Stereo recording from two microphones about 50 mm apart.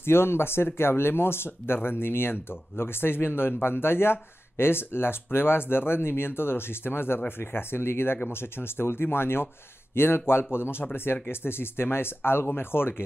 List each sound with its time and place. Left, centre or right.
0.0 s speech: left